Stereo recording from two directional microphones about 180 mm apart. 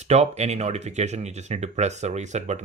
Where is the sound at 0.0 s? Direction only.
40° right (ahead or behind).